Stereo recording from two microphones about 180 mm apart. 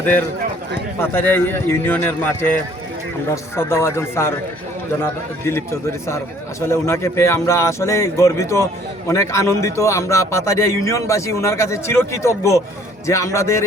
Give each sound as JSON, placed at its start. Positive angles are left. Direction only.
{"t": 0.9, "sound": "a man's voice", "side_deg": 10}
{"t": 6.7, "sound": "a man's voice", "side_deg": 15}